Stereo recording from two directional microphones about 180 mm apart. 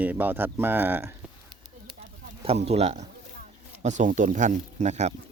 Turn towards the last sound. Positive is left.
turn(degrees=-40)  # may be behind; listen again after turning